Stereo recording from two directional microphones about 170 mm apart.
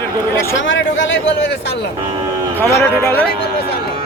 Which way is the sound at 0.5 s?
90° left.